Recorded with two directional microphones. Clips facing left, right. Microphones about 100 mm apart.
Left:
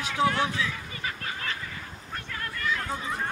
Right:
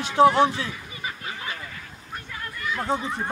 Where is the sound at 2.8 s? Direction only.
30° right (ahead or behind).